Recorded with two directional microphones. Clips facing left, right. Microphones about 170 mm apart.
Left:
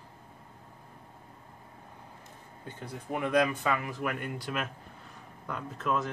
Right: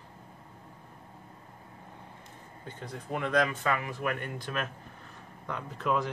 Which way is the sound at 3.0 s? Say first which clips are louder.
Left 1 dB; 10° left (ahead or behind).